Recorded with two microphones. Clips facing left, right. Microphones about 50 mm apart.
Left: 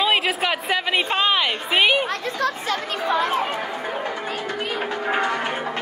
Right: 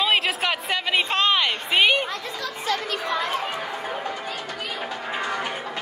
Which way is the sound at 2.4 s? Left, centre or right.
Left.